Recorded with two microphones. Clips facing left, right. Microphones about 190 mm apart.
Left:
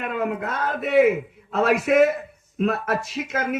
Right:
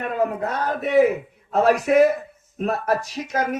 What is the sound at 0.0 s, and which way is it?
A man's voice, 35° right (ahead or behind).